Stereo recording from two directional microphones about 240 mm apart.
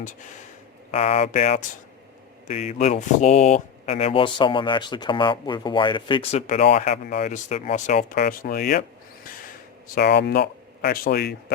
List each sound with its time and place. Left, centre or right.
0.9 s speech: left
6.5 s speech: left
9.9 s speech: left